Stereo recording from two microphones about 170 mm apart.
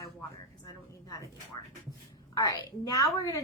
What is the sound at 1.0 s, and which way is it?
Speech, 20° left (ahead or behind).